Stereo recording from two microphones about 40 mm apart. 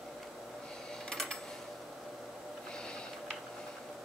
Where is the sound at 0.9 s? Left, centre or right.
Centre.